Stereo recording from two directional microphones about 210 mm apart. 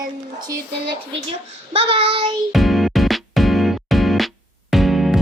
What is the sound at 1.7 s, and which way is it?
Speech, 25° right (ahead or behind).